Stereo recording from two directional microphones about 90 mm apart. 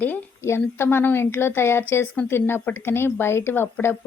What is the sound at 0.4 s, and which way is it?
A woman's voice, 30° left (ahead or behind).